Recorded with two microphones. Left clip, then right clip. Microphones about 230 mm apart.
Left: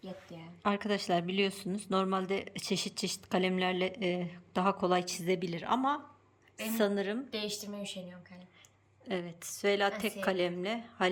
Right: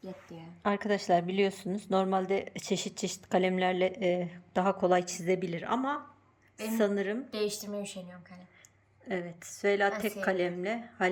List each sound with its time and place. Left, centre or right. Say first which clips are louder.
0.0 s a woman's voice: right 1 dB; centre
9.0 s a woman's voice: right 1 dB; centre